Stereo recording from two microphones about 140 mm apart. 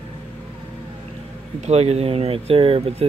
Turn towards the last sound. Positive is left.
turn(degrees=-45)  # may be behind; listen again after turning